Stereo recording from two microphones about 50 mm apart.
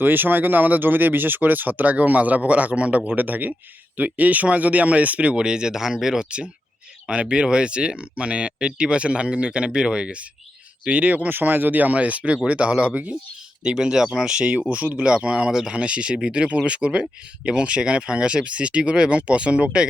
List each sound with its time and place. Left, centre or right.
0.0 s speech: right
13.7 s speech: centre